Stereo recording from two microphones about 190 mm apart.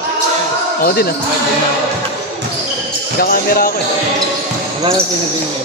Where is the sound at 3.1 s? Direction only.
50° left (ahead or behind).